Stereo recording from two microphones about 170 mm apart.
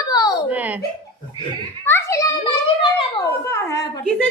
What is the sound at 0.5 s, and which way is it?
Speech, 10° right (ahead or behind).